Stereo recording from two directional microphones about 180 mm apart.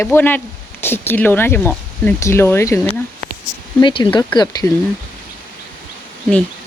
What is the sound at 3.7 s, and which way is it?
Speech, 25° left (ahead or behind).